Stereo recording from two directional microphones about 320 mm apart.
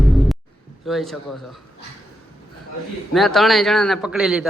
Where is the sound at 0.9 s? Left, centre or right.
Centre.